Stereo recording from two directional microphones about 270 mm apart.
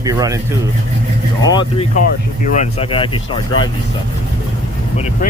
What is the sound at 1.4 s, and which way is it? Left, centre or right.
Speech, centre.